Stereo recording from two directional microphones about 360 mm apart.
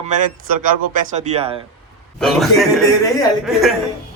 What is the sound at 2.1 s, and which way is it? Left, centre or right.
A man's voice, centre.